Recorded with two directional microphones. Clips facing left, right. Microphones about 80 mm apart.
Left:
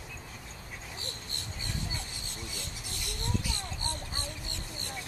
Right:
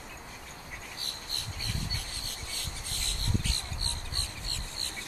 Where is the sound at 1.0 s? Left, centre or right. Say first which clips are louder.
Even; left.